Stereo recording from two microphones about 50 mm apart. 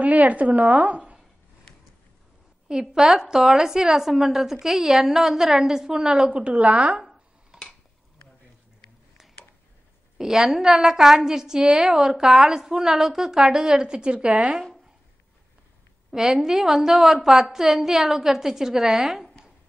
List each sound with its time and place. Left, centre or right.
0.0 s a woman's voice: right
2.7 s a woman's voice: centre
9.2 s a sound: centre
10.1 s a woman's voice: centre
14.5 s speech: centre
16.1 s a woman's voice: centre